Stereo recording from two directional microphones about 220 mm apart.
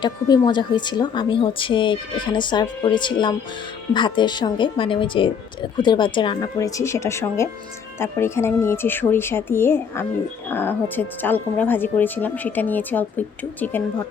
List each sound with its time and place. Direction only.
0.0 s speech: 20° left (ahead or behind)